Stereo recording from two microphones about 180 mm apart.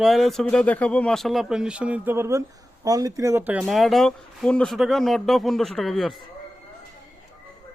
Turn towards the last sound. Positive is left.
turn(degrees=0)  # may be behind; listen again after turning